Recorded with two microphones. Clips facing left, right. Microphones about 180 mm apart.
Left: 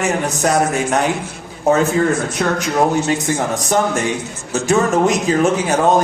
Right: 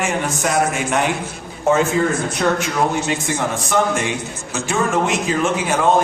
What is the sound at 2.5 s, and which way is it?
A man's voice, 40° left (ahead or behind).